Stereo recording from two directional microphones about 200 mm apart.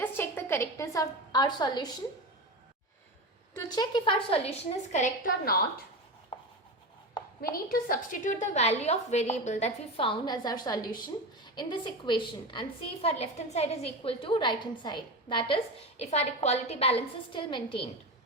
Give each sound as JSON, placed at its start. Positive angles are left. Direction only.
{"t": 0.0, "sound": "a woman's voice", "side_deg": 10}
{"t": 3.5, "sound": "a woman's voice", "side_deg": 20}
{"t": 6.3, "sound": "chopping", "side_deg": 25}
{"t": 7.5, "sound": "a woman's voice", "side_deg": 45}